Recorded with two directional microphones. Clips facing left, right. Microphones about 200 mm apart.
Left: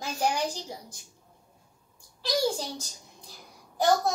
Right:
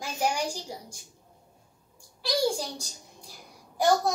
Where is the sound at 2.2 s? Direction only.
15° right (ahead or behind).